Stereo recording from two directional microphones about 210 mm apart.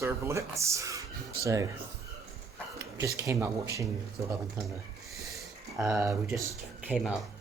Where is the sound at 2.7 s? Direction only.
15° right (ahead or behind).